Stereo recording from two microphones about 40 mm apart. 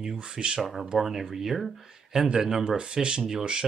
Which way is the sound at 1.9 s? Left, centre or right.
Centre.